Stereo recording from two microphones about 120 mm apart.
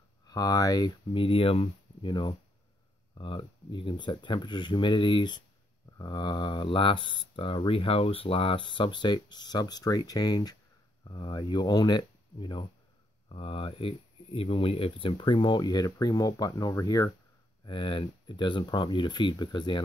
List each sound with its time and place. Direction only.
0.3 s speech: 30° left (ahead or behind)
1.1 s speech: 50° left (ahead or behind)
13.3 s speech: 50° left (ahead or behind); by 17.1 s 30° left (ahead or behind)
17.6 s speech: 45° left (ahead or behind)